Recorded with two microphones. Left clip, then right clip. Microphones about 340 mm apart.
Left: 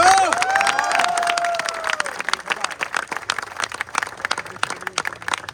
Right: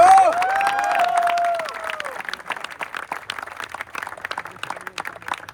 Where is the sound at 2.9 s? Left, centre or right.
Centre.